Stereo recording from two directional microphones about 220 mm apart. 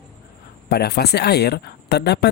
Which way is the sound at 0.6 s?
45° left (ahead or behind).